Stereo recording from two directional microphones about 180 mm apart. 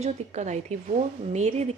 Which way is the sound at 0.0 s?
40° right (ahead or behind).